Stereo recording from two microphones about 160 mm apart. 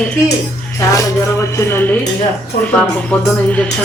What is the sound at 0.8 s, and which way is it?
A man's voice, 20° left (ahead or behind).